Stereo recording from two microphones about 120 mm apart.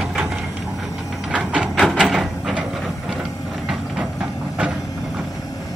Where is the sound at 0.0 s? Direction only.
5° right (ahead or behind).